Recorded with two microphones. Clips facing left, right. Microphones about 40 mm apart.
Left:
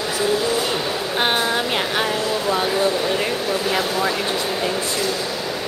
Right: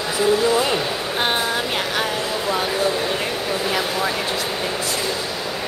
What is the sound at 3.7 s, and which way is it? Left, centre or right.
Vehicle, centre.